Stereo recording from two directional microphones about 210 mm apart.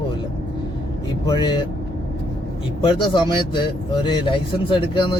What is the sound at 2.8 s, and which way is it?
A man's voice, 25° left (ahead or behind).